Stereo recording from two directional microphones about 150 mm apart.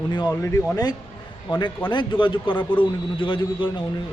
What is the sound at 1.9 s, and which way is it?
A man's voice, 35° left (ahead or behind).